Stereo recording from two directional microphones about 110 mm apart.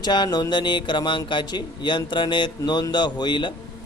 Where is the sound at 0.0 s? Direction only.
40° left (ahead or behind).